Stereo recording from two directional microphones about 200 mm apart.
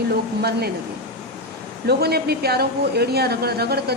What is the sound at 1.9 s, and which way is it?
Speech, 50° right (ahead or behind).